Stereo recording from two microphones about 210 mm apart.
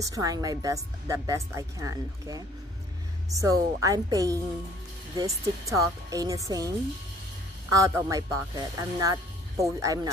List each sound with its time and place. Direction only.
0.1 s speech: 15° right (ahead or behind)
7.7 s speech: 15° right (ahead or behind)